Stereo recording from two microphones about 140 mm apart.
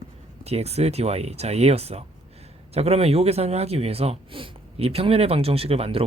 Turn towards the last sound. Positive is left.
turn(degrees=-45)  # may be behind; listen again after turning